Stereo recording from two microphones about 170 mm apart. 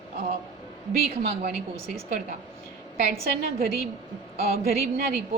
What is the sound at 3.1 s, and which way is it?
Speech, 60° right (ahead or behind).